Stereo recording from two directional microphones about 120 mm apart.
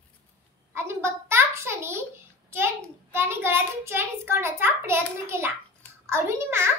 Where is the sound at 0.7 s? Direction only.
20° right (ahead or behind).